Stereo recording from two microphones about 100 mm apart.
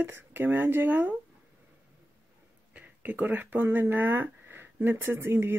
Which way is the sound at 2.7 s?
15° right (ahead or behind).